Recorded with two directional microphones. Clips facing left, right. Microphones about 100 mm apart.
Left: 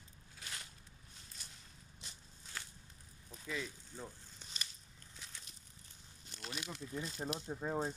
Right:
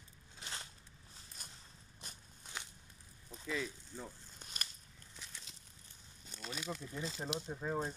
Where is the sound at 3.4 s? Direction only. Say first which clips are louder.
Right 3 dB; centre (ahead or behind).